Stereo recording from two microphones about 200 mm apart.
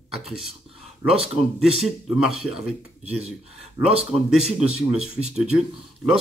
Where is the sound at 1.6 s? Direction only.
Centre (ahead or behind).